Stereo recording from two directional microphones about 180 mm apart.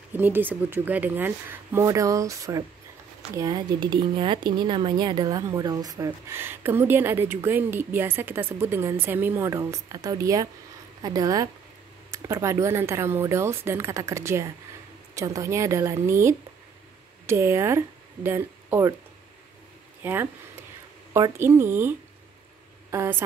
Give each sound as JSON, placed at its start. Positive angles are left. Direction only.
{"t": 0.1, "sound": "speech", "side_deg": -10}
{"t": 20.0, "sound": "speech", "side_deg": -10}